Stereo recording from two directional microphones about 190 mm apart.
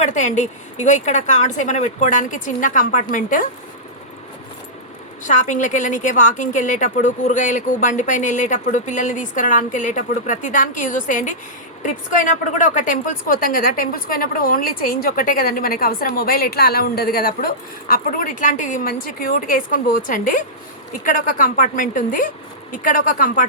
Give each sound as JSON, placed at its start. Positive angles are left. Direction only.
{"t": 0.0, "sound": "a woman's voice", "side_deg": 40}
{"t": 5.2, "sound": "a woman's voice", "side_deg": 40}